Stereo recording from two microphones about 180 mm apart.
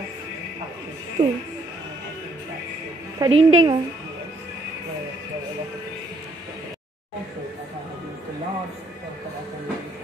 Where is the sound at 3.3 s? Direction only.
35° right (ahead or behind).